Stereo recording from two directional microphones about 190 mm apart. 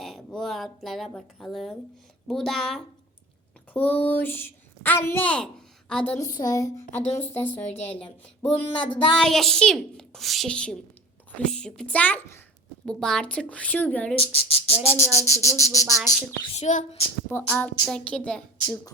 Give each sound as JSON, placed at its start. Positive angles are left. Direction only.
{"t": 0.0, "sound": "a woman's voice", "side_deg": 0}
{"t": 6.1, "sound": "a woman's voice", "side_deg": 20}
{"t": 7.6, "sound": "speech", "side_deg": 35}
{"t": 8.4, "sound": "a woman's voice", "side_deg": 10}
{"t": 14.2, "sound": "speech", "side_deg": 30}
{"t": 14.8, "sound": "a woman's voice", "side_deg": 15}
{"t": 16.6, "sound": "speech", "side_deg": 35}
{"t": 17.3, "sound": "a woman's voice", "side_deg": 5}